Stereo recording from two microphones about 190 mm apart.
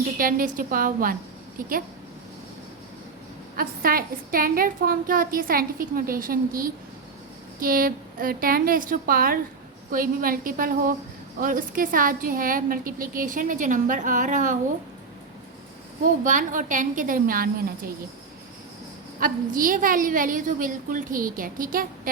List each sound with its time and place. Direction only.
0.2 s a woman's voice: 45° right (ahead or behind)
3.6 s a woman's voice: 50° right (ahead or behind)
16.2 s a woman's voice: 45° right (ahead or behind)
19.2 s a woman's voice: 45° right (ahead or behind)